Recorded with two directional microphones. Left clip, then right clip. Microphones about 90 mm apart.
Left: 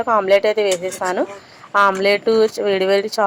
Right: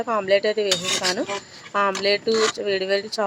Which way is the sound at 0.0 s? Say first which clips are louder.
Left 6 dB; 20° left (ahead or behind).